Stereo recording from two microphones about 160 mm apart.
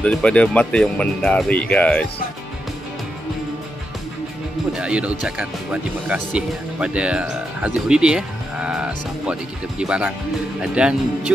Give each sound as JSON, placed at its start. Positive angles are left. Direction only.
{"t": 0.0, "sound": "speech", "side_deg": 5}
{"t": 4.7, "sound": "speech", "side_deg": -5}